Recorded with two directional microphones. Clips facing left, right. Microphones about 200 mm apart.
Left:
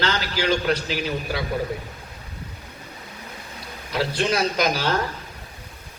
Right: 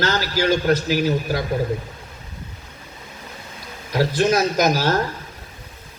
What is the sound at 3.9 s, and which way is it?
A man's voice, 45° right (ahead or behind).